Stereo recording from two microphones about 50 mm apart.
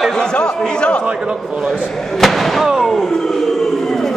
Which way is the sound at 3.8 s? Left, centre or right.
Centre.